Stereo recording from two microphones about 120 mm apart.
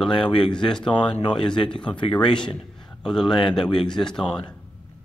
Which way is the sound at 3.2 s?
40° left (ahead or behind).